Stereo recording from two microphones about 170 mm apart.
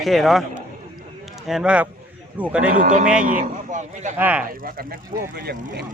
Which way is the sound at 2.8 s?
50° right (ahead or behind).